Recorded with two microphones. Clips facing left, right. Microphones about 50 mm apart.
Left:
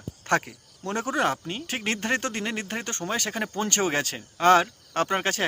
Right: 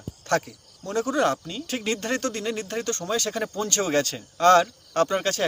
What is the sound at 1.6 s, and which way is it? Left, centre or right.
Speech, left.